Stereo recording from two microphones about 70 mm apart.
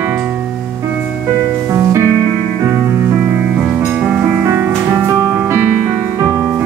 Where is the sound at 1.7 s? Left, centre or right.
Right.